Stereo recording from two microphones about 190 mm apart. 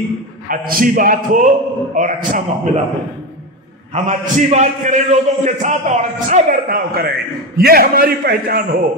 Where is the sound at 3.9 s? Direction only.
40° right (ahead or behind).